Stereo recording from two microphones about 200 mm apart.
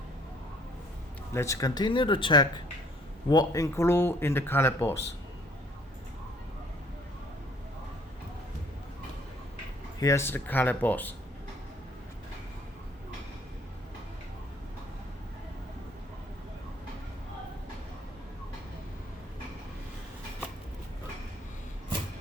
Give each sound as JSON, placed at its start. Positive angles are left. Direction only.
{"t": 1.3, "sound": "speech", "side_deg": 15}
{"t": 10.0, "sound": "speech", "side_deg": 15}